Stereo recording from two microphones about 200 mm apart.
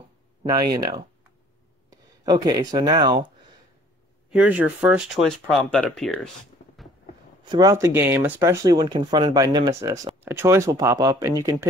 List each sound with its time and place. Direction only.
0.4 s speech: 20° right (ahead or behind)
4.3 s speech: 5° right (ahead or behind)
7.4 s speech: 20° right (ahead or behind)